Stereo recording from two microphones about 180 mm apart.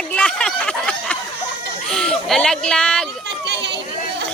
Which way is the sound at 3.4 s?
75° right (ahead or behind).